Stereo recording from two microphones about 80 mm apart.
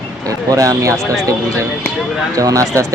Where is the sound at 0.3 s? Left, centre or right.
Right.